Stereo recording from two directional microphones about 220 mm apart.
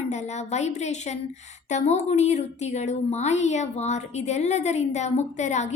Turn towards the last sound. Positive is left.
turn(degrees=30)  # may be behind; listen again after turning